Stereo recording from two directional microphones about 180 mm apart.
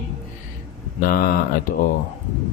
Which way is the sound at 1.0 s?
55° left (ahead or behind).